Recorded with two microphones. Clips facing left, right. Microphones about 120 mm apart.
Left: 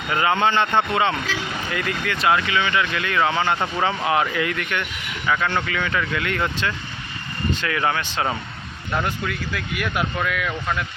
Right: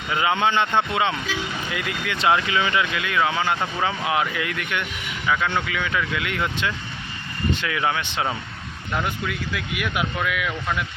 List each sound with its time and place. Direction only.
0.1 s speech: 10° right (ahead or behind)
2.1 s speech: 25° right (ahead or behind)
2.9 s speech: 5° right (ahead or behind)
9.0 s speech: 10° right (ahead or behind)